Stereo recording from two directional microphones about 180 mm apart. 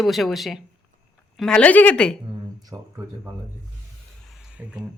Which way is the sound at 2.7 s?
20° right (ahead or behind).